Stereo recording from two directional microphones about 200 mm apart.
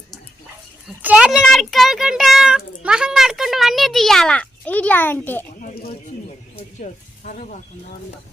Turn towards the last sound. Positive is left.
turn(degrees=40)  # may be behind; listen again after turning